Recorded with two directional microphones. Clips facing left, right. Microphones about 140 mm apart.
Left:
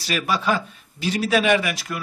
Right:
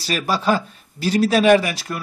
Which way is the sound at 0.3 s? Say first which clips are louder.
Right 4 dB; 35° right (ahead or behind).